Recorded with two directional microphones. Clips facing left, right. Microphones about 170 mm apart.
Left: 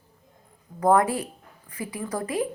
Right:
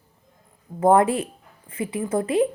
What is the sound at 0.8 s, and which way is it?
Speech, 25° right (ahead or behind).